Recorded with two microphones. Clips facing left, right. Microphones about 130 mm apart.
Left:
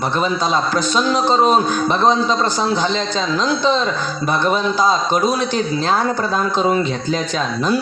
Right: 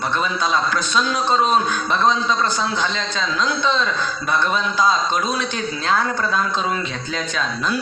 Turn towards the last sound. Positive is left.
turn(degrees=30)  # may be behind; listen again after turning